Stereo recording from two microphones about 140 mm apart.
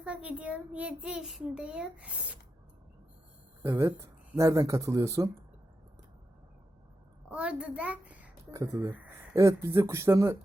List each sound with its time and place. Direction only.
0.0 s a child's voice: 10° right (ahead or behind)
3.6 s speech: 20° right (ahead or behind)
7.3 s a child's voice: 10° right (ahead or behind)
8.5 s speech: 20° right (ahead or behind)